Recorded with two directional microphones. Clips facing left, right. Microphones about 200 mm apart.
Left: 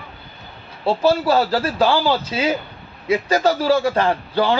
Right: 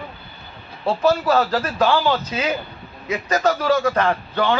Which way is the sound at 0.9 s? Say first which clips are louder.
Left 1 dB; 30° left (ahead or behind).